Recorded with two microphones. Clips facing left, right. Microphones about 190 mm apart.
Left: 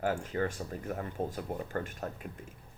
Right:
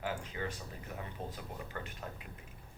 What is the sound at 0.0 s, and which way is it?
Speech, 50° left (ahead or behind).